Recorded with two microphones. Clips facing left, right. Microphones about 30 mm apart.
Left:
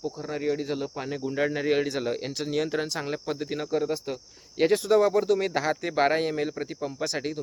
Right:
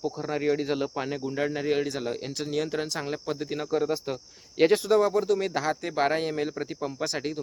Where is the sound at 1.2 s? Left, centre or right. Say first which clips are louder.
Left 5 dB; centre.